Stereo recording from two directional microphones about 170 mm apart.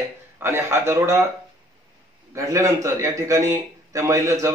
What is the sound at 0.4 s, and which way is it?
Speech, 15° right (ahead or behind).